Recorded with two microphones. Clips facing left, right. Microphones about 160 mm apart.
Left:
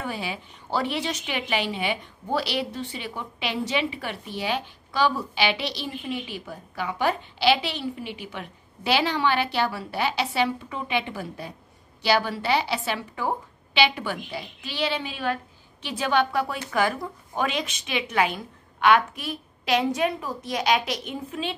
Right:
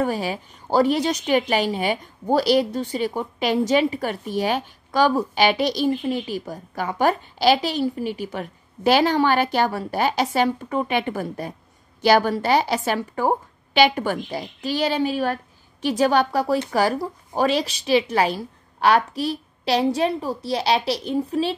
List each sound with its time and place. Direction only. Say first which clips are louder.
0.0 s a woman's voice: right 8 dB; 40° right (ahead or behind)